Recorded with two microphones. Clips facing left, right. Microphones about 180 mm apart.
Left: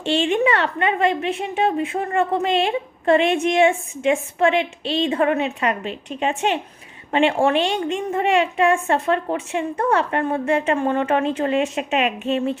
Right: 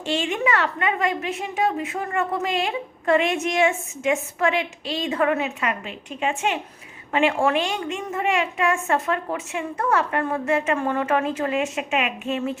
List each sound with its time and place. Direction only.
0.0 s a woman's voice: 30° left (ahead or behind)